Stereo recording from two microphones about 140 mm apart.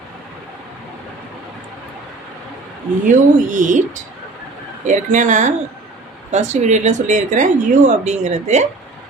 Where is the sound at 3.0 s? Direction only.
65° right (ahead or behind).